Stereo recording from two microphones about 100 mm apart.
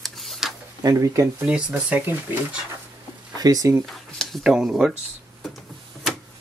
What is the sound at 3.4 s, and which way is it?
Speech, 40° right (ahead or behind).